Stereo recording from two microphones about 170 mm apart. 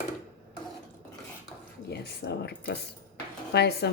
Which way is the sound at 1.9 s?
70° left (ahead or behind).